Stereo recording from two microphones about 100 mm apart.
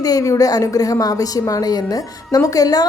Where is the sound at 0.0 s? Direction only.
35° left (ahead or behind).